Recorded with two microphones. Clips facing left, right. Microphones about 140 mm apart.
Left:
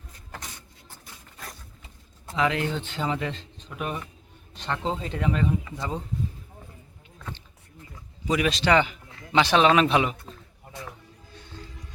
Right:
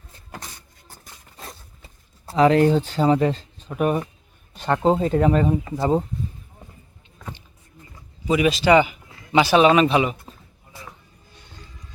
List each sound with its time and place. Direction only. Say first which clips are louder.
0.3 s a sound: right 3 dB; 35° right (ahead or behind)
1.8 s speech: right 2 dB; 35° right (ahead or behind)
7.2 s vehicle: right 2 dB; 15° right (ahead or behind)
8.3 s a man's voice: right 5 dB; 5° right (ahead or behind)